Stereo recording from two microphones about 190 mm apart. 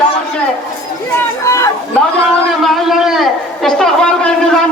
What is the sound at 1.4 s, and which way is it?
Speech, 15° left (ahead or behind).